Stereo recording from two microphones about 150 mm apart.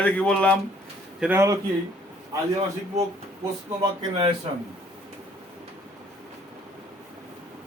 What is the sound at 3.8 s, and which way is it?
Speech, 30° right (ahead or behind).